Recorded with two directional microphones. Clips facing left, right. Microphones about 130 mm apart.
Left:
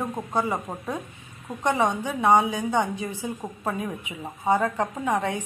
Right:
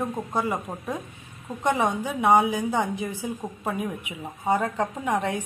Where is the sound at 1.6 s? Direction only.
Centre (ahead or behind).